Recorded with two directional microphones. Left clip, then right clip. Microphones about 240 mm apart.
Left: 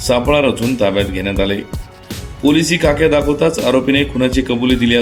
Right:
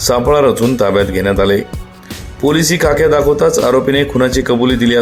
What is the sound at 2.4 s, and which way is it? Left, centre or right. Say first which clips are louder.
Speech: right 1 dB; right.